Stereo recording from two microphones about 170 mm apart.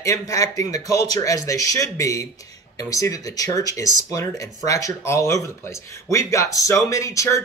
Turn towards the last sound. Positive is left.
turn(degrees=20)  # may be behind; listen again after turning